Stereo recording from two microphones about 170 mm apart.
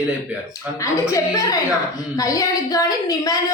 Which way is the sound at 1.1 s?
20° left (ahead or behind).